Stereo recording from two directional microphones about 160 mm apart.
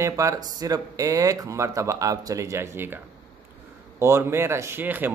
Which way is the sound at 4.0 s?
15° right (ahead or behind).